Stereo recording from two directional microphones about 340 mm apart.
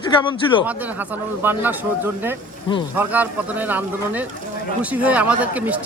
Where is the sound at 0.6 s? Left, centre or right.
Centre.